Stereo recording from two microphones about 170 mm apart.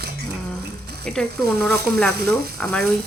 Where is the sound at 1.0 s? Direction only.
5° left (ahead or behind).